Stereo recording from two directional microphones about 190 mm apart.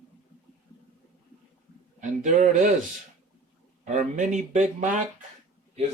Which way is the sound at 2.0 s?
40° right (ahead or behind).